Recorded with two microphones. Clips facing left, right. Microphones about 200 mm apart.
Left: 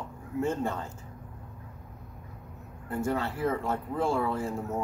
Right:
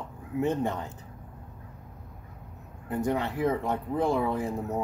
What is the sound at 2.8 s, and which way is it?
Speech, 15° right (ahead or behind).